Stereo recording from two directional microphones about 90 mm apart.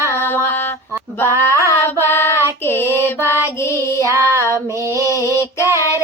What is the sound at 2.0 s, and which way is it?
Music, 30° left (ahead or behind).